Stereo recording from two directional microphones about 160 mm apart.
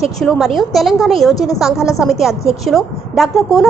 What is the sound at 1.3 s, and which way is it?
Speech, 20° left (ahead or behind).